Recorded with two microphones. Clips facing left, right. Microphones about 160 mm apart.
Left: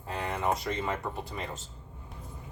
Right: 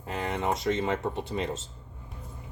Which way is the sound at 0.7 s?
25° right (ahead or behind).